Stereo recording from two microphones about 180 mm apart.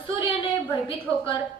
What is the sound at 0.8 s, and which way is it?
Speech, 30° left (ahead or behind).